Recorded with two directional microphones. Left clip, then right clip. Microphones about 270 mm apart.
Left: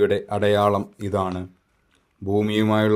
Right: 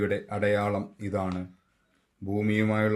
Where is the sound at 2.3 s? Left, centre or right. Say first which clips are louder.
Left 7 dB; left.